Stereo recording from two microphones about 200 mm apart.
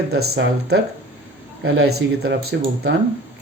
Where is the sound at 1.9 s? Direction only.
55° right (ahead or behind).